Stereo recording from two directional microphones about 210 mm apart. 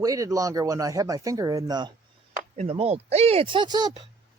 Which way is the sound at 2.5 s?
30° right (ahead or behind).